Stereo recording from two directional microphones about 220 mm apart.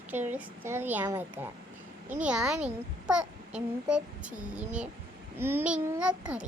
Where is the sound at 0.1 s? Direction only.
10° right (ahead or behind).